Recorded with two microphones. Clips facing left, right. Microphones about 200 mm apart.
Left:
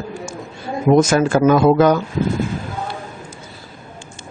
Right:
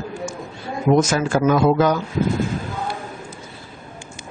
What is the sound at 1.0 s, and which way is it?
Speech, 55° left (ahead or behind).